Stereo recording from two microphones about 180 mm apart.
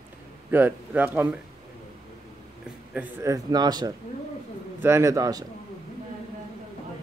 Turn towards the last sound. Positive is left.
turn(degrees=-20)  # may be behind; listen again after turning